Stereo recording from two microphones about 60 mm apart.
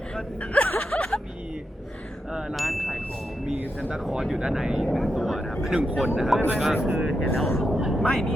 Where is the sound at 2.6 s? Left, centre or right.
Centre.